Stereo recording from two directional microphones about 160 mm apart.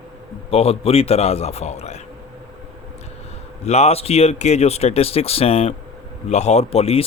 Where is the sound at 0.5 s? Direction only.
40° left (ahead or behind).